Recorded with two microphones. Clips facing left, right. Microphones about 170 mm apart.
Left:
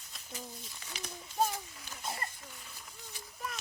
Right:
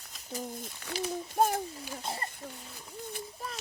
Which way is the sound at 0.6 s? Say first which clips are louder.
Right 9 dB; 60° right (ahead or behind).